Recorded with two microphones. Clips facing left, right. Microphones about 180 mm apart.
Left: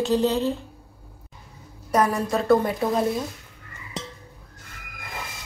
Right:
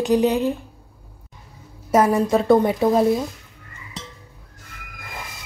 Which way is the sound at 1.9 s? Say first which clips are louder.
Right 5 dB; 25° right (ahead or behind).